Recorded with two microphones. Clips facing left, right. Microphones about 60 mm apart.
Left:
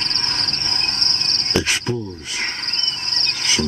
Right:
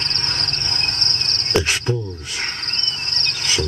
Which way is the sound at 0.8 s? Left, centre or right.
Right.